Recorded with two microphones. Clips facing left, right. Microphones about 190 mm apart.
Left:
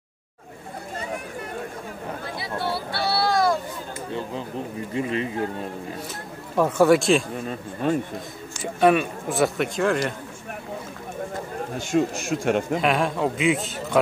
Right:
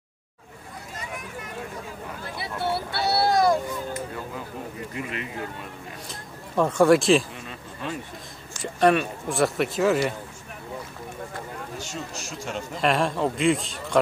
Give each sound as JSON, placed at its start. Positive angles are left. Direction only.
{"t": 3.0, "sound": "a sound", "side_deg": -20}
{"t": 4.9, "sound": "speech", "side_deg": 30}
{"t": 6.5, "sound": "a man's voice", "side_deg": 5}
{"t": 7.3, "sound": "speech", "side_deg": 45}
{"t": 8.7, "sound": "a man's voice", "side_deg": 5}
{"t": 11.8, "sound": "a man's voice", "side_deg": 55}
{"t": 12.8, "sound": "a man's voice", "side_deg": 0}